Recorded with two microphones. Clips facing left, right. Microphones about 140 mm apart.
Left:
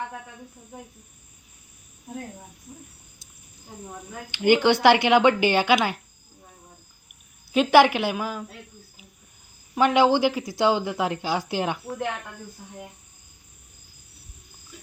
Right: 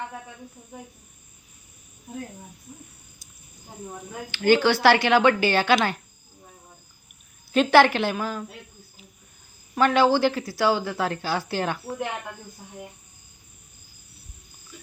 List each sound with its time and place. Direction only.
4.3 s speech: 15° left (ahead or behind)
7.5 s speech: 10° left (ahead or behind)
9.7 s speech: 15° left (ahead or behind)